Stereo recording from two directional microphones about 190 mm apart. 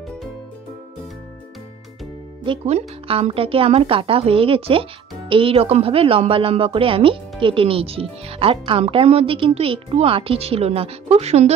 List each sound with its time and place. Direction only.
2.4 s a woman's voice: 30° right (ahead or behind)